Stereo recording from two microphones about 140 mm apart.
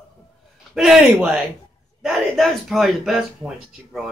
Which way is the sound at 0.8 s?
5° right (ahead or behind).